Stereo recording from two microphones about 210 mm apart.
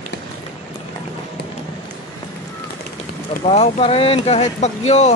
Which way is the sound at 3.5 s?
30° left (ahead or behind).